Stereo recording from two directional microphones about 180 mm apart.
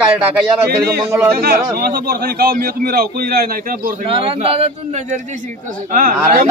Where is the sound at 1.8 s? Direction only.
60° right (ahead or behind).